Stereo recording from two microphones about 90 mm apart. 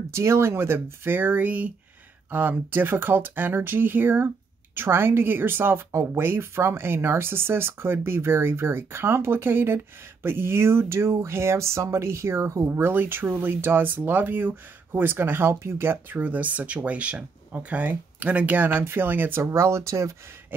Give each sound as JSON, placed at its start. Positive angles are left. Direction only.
{"t": 0.1, "sound": "speech", "side_deg": -30}